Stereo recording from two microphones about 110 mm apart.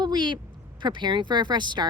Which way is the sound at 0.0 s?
45° right (ahead or behind).